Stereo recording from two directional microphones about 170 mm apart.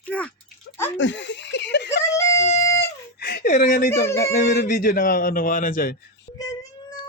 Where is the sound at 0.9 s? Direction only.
90° left.